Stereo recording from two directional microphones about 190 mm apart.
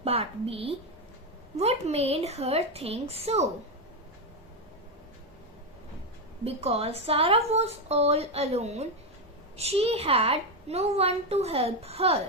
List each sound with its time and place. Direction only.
0.0 s a woman's voice: 30° right (ahead or behind)
6.4 s a woman's voice: 35° right (ahead or behind)